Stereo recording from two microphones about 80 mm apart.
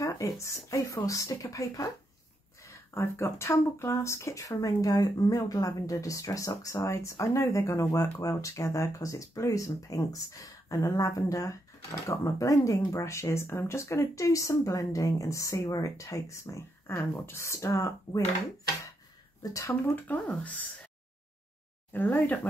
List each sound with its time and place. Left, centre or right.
0.0 s speech: left
19.4 s speech: left
20.2 s speech: centre
21.9 s speech: left